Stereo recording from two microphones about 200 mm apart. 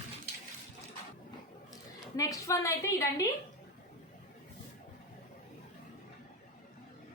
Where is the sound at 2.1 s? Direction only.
15° left (ahead or behind).